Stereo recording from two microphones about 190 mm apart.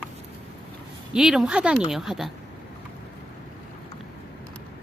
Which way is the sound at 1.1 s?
5° right (ahead or behind).